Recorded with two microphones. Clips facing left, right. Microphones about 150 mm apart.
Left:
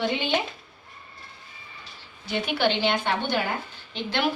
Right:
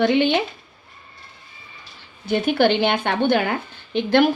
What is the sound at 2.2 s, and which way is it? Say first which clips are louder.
Speech: right 7 dB; 50° right (ahead or behind).